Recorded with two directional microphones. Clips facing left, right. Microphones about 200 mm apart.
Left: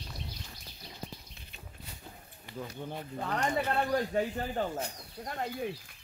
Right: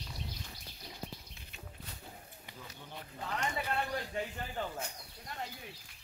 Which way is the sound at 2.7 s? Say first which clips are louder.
Left 10 dB; 55° left (ahead or behind).